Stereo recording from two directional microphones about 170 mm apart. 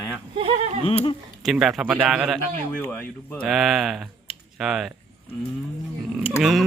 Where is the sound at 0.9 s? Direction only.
35° left (ahead or behind).